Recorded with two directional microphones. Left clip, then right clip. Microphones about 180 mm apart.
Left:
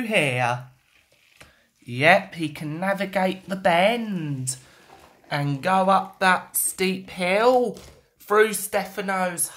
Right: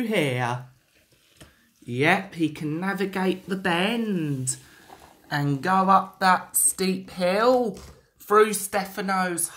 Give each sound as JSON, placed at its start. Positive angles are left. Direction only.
{"t": 0.0, "sound": "speech", "side_deg": 15}
{"t": 1.9, "sound": "speech", "side_deg": 15}
{"t": 8.5, "sound": "speech", "side_deg": 0}